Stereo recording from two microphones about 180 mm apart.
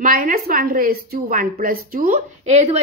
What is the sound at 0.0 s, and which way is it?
A woman's voice, 50° right (ahead or behind).